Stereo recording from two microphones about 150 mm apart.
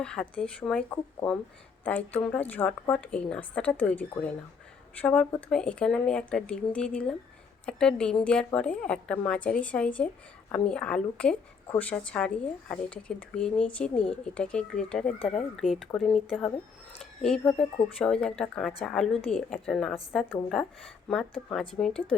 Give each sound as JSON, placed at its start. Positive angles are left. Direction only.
{"t": 0.0, "sound": "a woman's voice", "side_deg": 5}